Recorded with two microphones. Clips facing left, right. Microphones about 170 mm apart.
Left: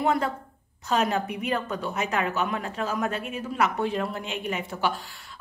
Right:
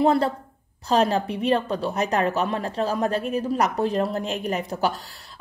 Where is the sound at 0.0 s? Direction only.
35° right (ahead or behind).